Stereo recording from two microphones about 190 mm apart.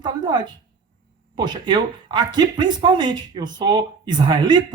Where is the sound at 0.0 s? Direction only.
20° right (ahead or behind).